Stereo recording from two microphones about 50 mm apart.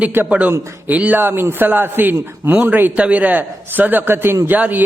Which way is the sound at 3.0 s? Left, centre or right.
Right.